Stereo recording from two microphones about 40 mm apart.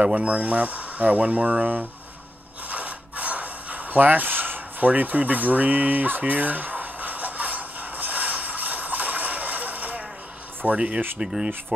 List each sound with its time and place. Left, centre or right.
0.0 s speech: right
2.7 s a sound: right
10.7 s speech: right